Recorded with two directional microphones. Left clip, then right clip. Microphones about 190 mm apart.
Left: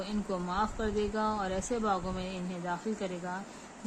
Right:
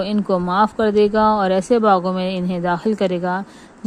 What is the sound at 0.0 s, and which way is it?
Speech, 45° right (ahead or behind).